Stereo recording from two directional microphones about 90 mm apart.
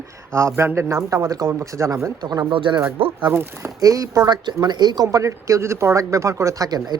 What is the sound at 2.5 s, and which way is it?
Speech, 70° right (ahead or behind).